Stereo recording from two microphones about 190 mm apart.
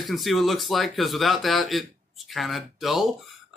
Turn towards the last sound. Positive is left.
turn(degrees=0)  # may be behind; listen again after turning